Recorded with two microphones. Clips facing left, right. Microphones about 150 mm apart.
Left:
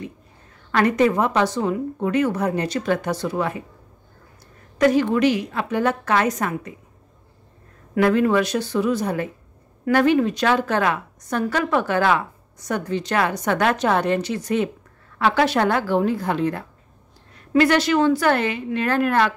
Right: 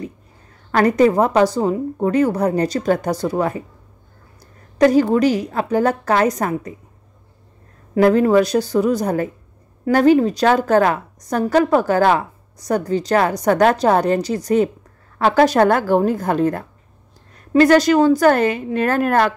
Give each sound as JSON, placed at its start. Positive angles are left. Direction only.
{"t": 0.7, "sound": "a woman's voice", "side_deg": -40}
{"t": 4.7, "sound": "a woman's voice", "side_deg": -35}
{"t": 7.9, "sound": "a woman's voice", "side_deg": -40}